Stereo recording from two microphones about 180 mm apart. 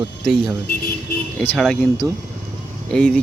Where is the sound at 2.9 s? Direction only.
5° left (ahead or behind).